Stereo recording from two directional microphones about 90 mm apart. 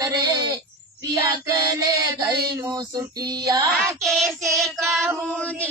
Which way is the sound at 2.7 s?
50° right (ahead or behind).